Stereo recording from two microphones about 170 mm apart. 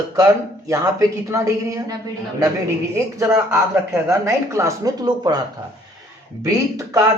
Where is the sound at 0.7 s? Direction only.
20° right (ahead or behind).